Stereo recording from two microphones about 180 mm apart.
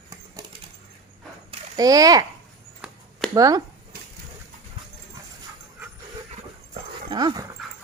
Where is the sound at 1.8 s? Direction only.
20° right (ahead or behind).